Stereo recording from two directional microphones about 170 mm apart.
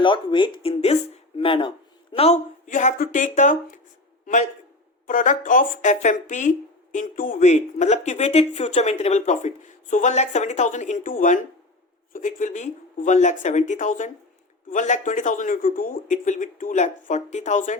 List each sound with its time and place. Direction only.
0.0 s speech: 30° left (ahead or behind); by 3.8 s 45° left (ahead or behind)
5.0 s speech: 50° left (ahead or behind)